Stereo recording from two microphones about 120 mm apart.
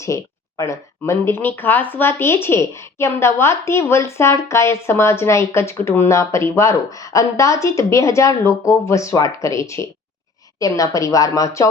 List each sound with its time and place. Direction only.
0.0 s speech: 25° left (ahead or behind)